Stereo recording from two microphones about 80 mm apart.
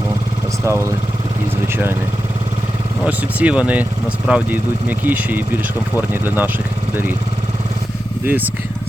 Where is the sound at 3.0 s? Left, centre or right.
Centre.